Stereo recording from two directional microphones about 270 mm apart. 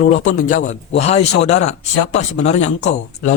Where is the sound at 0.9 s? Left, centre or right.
Left.